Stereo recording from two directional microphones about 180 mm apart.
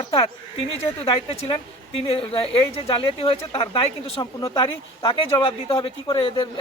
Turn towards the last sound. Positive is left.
turn(degrees=30)  # may be behind; listen again after turning